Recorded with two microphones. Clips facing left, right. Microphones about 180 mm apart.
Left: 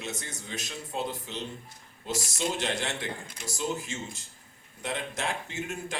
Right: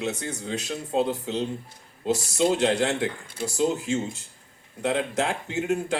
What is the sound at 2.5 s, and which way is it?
Speech, 65° right (ahead or behind).